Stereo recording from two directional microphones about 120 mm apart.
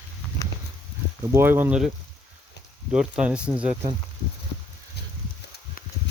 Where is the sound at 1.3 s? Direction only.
20° right (ahead or behind).